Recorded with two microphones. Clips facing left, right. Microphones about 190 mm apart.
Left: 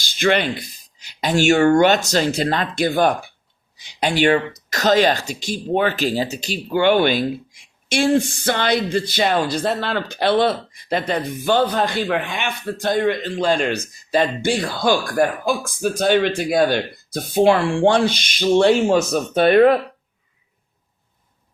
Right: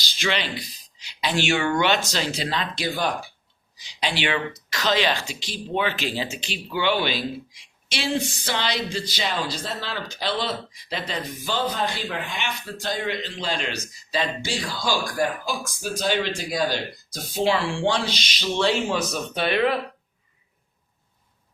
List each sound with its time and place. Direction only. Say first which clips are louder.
0.0 s speech: left 9 dB; 50° left (ahead or behind)